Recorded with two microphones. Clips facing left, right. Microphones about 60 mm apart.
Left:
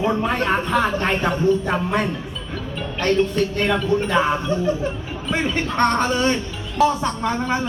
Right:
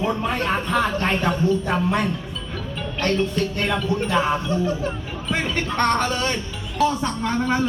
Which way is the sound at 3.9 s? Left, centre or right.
Left.